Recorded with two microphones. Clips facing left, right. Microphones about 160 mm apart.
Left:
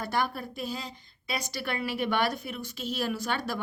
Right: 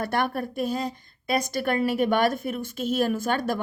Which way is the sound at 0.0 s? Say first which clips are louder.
Right 4 dB; 60° right (ahead or behind).